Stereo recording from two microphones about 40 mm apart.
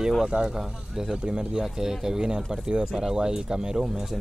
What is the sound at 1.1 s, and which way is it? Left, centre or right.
Speech, right.